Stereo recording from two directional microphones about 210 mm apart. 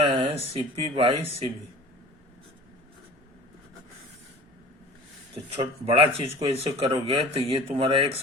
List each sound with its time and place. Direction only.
0.0 s speech: 25° right (ahead or behind)
5.5 s speech: 25° right (ahead or behind)